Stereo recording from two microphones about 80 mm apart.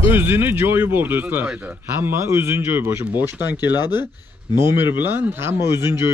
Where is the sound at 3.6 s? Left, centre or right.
Left.